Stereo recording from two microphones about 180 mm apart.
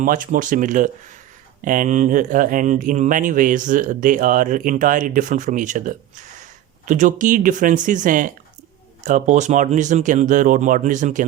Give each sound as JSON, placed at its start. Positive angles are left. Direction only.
{"t": 0.0, "sound": "speech", "side_deg": -45}